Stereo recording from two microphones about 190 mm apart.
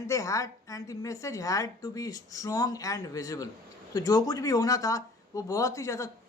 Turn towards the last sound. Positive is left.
turn(degrees=15)  # may be behind; listen again after turning